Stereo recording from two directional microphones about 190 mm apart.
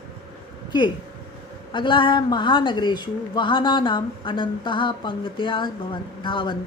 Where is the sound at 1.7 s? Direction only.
25° left (ahead or behind).